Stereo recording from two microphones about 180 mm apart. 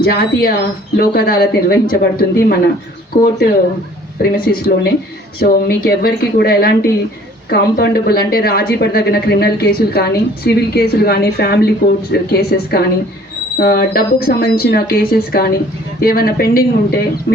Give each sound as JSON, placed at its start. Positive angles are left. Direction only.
{"t": 0.0, "sound": "a woman's voice", "side_deg": 55}